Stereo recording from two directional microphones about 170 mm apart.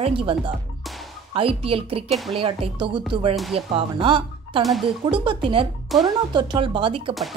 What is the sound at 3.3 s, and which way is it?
Speech, centre (ahead or behind).